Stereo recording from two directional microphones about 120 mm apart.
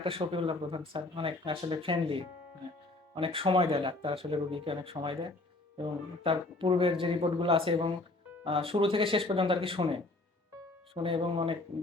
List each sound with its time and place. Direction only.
0.0 s speech: 50° right (ahead or behind)